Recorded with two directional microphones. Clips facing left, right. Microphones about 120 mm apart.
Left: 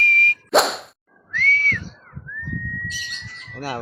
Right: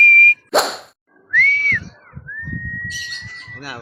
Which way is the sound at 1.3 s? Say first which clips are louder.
Right 3 dB; 35° left (ahead or behind).